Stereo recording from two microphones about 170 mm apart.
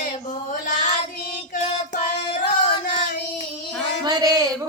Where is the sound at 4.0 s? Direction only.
20° right (ahead or behind).